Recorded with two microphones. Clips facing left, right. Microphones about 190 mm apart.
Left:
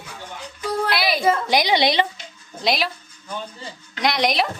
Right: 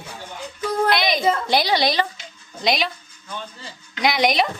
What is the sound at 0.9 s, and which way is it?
A woman's voice, 5° left (ahead or behind).